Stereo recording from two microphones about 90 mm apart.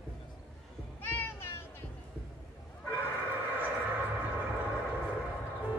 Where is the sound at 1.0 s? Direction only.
25° left (ahead or behind).